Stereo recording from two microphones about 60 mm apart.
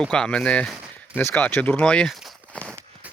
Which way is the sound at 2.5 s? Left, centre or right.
Centre.